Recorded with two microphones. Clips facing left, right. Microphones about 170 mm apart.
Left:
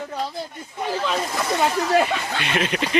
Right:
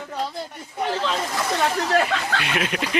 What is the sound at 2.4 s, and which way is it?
Speech, 5° right (ahead or behind).